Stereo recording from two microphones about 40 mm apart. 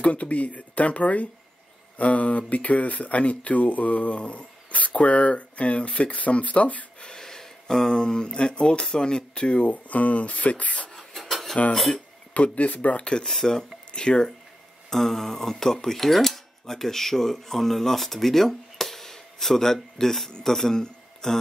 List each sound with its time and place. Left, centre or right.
0.0 s speech: left
7.1 s speech: centre; by 10.9 s left
10.9 s a sound: centre
11.7 s speech: centre
12.4 s speech: left
13.2 s speech: centre
14.9 s speech: centre